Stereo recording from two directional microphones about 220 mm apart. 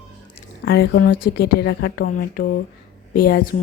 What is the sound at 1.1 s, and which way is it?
Speech, 40° left (ahead or behind).